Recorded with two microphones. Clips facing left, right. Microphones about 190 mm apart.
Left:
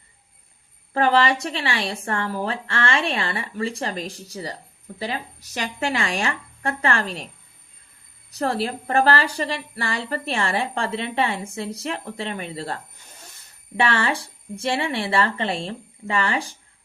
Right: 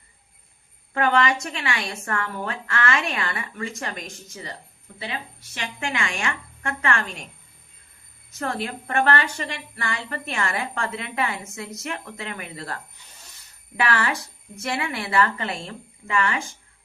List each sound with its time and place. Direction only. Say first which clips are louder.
0.9 s a woman's voice: left 2 dB; 30° left (ahead or behind)
8.3 s a woman's voice: left 5 dB; 35° left (ahead or behind)